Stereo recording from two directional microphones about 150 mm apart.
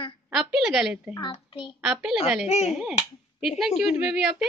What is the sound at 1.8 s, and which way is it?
Speech, 5° right (ahead or behind).